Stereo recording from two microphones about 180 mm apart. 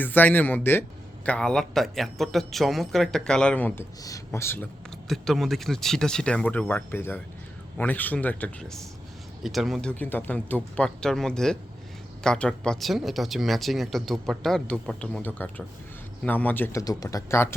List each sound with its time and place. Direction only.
0.0 s speech: 10° left (ahead or behind)